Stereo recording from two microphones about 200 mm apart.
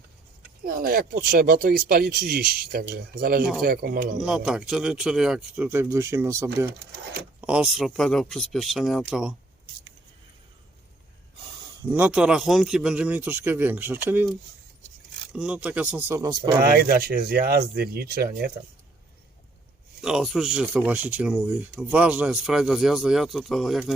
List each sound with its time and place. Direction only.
0.6 s speech: 45° right (ahead or behind)
4.2 s speech: 5° right (ahead or behind)
7.4 s speech: 5° right (ahead or behind)
11.8 s a man's voice: 10° right (ahead or behind)
15.4 s a man's voice: 5° right (ahead or behind)
16.6 s speech: 50° right (ahead or behind)
20.0 s speech: 5° right (ahead or behind)